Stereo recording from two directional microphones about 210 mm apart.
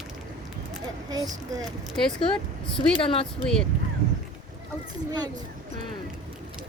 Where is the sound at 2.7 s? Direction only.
25° left (ahead or behind).